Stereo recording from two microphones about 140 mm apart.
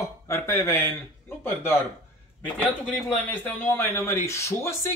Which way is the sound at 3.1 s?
15° left (ahead or behind).